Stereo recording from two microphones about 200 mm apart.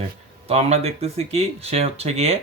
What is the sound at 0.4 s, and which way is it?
Speech, 30° right (ahead or behind).